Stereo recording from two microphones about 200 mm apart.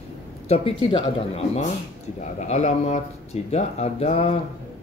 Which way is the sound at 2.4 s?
35° left (ahead or behind).